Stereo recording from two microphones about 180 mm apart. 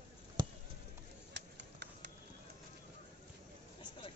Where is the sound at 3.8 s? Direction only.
30° left (ahead or behind).